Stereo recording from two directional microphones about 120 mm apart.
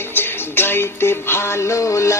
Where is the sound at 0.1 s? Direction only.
20° left (ahead or behind).